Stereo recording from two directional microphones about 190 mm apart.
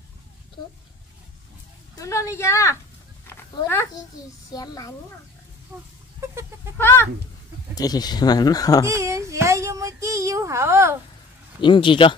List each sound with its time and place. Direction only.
2.0 s a woman's voice: 15° left (ahead or behind)
5.7 s speech: 10° right (ahead or behind)
6.8 s speech: 10° left (ahead or behind)
8.8 s speech: 15° right (ahead or behind)
11.6 s speech: 25° left (ahead or behind)